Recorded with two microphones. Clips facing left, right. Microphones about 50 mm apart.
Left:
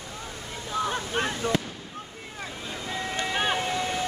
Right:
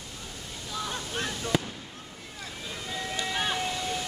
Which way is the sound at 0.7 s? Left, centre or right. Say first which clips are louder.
Left 6 dB; left.